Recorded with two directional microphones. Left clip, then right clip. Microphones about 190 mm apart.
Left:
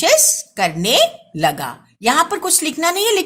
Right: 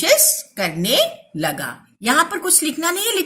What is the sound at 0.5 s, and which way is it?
Speech, 55° left (ahead or behind).